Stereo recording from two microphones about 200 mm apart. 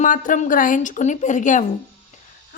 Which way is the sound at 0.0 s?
40° left (ahead or behind).